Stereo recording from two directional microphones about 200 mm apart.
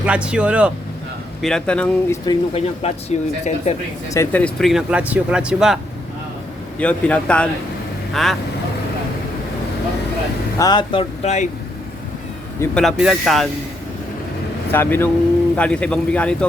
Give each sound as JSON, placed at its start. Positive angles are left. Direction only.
{"t": 0.0, "sound": "speech", "side_deg": -5}
{"t": 2.2, "sound": "speech", "side_deg": 30}
{"t": 4.1, "sound": "a man's voice", "side_deg": 10}
{"t": 10.6, "sound": "speech", "side_deg": 20}
{"t": 12.7, "sound": "speech", "side_deg": 0}
{"t": 14.7, "sound": "a man's voice", "side_deg": 10}